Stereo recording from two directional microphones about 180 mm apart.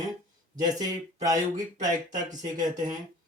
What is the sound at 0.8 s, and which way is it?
Speech, 20° right (ahead or behind).